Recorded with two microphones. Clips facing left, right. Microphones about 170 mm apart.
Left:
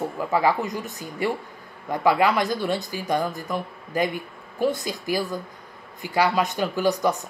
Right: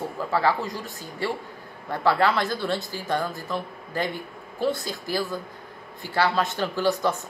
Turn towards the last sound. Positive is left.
turn(degrees=15)  # may be behind; listen again after turning